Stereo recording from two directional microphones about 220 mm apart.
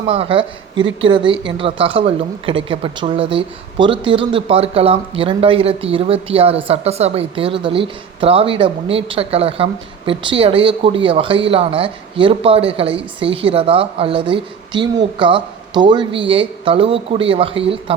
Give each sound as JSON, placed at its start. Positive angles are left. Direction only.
{"t": 0.1, "sound": "speech", "side_deg": -25}